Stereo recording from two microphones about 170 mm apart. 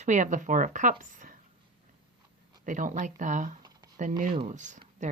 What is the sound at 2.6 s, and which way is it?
Speech, 50° right (ahead or behind).